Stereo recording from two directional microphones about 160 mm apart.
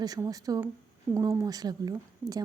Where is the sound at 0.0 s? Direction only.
25° right (ahead or behind).